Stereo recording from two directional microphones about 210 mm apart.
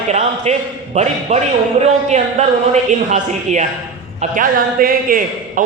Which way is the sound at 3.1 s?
35° right (ahead or behind).